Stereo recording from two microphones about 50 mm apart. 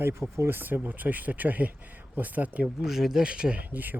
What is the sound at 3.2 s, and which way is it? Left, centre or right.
Speech, centre.